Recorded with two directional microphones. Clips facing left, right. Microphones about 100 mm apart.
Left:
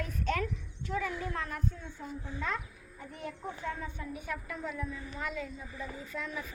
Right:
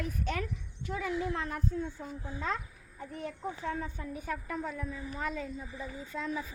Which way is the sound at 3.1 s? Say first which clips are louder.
Right 2 dB; 35° right (ahead or behind).